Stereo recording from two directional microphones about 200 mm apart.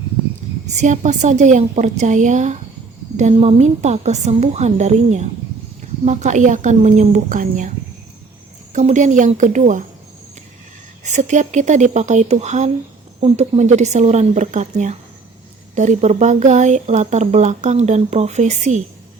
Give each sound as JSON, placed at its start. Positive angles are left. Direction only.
{"t": 0.4, "sound": "a sound", "side_deg": -35}
{"t": 0.8, "sound": "speech", "side_deg": -35}
{"t": 8.7, "sound": "speech", "side_deg": -35}
{"t": 11.0, "sound": "speech", "side_deg": -35}